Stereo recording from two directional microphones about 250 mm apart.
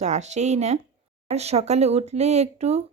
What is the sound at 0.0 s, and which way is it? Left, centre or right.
Speech, right.